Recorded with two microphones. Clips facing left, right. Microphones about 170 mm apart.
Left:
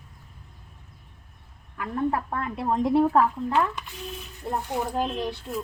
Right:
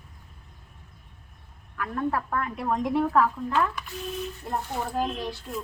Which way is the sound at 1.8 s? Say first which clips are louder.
Left 2 dB; 25° left (ahead or behind).